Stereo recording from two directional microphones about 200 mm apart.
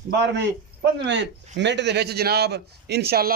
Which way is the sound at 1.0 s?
60° right (ahead or behind).